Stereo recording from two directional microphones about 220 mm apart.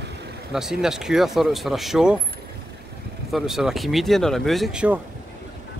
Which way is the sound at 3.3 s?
Centre (ahead or behind).